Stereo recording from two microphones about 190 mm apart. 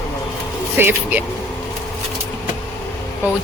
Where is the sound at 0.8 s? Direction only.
10° right (ahead or behind).